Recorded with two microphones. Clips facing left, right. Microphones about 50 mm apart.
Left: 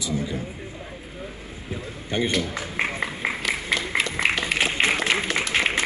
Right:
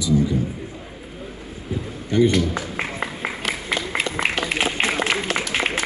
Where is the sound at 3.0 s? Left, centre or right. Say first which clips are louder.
Even; centre.